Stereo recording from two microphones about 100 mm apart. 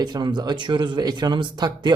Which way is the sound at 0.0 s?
45° right (ahead or behind).